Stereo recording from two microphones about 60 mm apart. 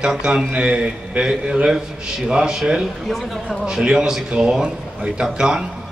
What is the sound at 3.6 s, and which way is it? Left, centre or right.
A man's voice, centre.